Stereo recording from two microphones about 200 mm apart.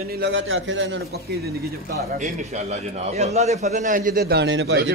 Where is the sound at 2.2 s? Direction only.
35° right (ahead or behind).